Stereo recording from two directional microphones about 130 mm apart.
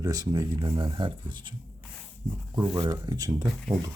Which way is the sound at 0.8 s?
40° right (ahead or behind).